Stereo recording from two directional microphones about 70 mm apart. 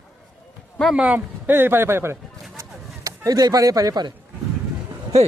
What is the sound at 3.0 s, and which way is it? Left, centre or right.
Speech, right.